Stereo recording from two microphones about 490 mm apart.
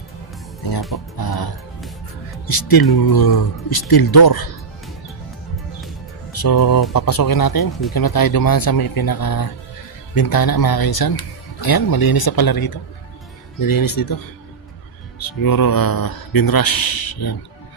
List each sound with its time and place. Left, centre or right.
1.1 s music: left
2.4 s a man's voice: left
6.3 s a man's voice: left